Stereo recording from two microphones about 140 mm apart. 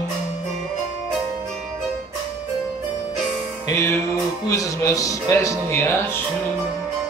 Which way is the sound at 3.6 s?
20° left (ahead or behind).